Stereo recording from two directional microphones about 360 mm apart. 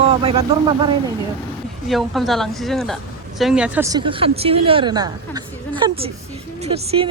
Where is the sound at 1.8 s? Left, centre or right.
Centre.